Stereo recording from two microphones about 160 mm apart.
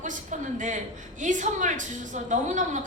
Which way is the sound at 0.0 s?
50° right (ahead or behind).